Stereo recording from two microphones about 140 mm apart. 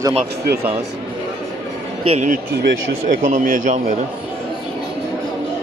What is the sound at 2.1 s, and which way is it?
Speech, 60° right (ahead or behind).